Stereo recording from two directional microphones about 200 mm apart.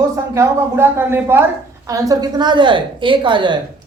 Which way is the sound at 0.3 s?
10° right (ahead or behind).